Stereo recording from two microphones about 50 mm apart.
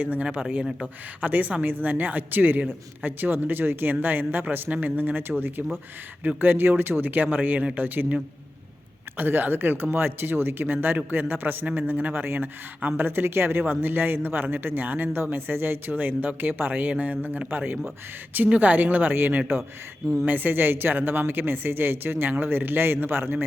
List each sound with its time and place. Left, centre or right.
0.0 s a man's voice: right
19.1 s speech: right
20.2 s speech: right